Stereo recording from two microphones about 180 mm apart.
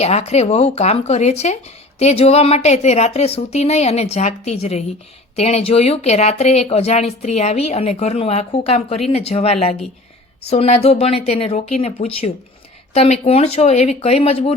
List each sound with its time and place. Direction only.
0.0 s speech: 35° left (ahead or behind)